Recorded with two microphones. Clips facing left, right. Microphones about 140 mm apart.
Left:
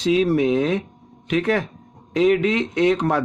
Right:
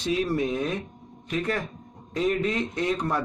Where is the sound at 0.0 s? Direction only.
90° left.